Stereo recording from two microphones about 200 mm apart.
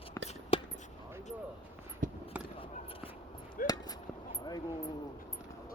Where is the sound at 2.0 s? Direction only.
40° right (ahead or behind).